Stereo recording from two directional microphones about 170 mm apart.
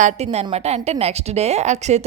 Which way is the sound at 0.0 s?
40° right (ahead or behind).